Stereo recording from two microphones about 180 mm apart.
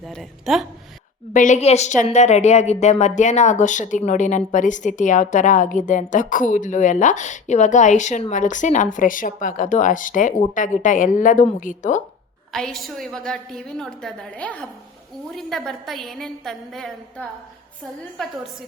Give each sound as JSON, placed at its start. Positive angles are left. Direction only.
{"t": 0.1, "sound": "a woman's voice", "side_deg": 0}
{"t": 1.3, "sound": "speech", "side_deg": 45}
{"t": 12.5, "sound": "a woman's voice", "side_deg": 0}